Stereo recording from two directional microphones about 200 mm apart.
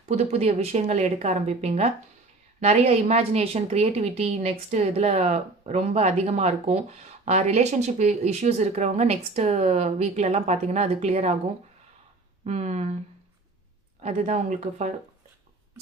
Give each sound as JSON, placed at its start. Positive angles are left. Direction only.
{"t": 0.0, "sound": "a woman's voice", "side_deg": -35}
{"t": 12.5, "sound": "a woman's voice", "side_deg": -35}
{"t": 14.0, "sound": "a woman's voice", "side_deg": -35}